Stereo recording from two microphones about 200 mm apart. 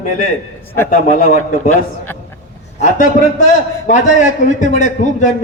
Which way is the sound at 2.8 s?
40° left (ahead or behind).